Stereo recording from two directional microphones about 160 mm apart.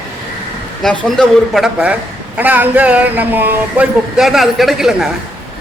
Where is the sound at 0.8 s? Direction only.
Centre (ahead or behind).